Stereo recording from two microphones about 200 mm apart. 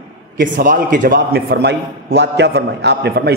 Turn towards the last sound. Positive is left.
turn(degrees=-55)  # may be behind; listen again after turning